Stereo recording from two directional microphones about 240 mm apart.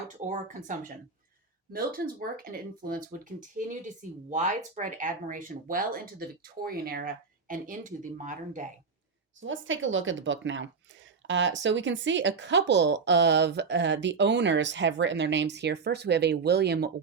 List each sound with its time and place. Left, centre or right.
0.2 s speech: right
9.4 s speech: right